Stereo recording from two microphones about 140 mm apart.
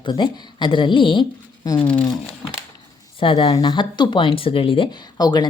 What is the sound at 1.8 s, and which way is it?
Speech, 10° left (ahead or behind).